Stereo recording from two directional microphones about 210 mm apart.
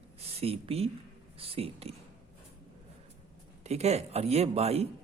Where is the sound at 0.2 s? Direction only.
30° right (ahead or behind).